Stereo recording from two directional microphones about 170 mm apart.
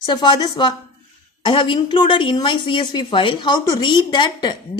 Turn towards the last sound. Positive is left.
turn(degrees=25)  # may be behind; listen again after turning